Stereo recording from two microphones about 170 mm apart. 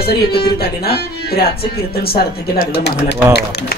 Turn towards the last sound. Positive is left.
turn(degrees=75)  # may be behind; listen again after turning